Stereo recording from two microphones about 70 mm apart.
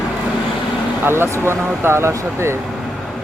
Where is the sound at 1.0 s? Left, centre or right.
Right.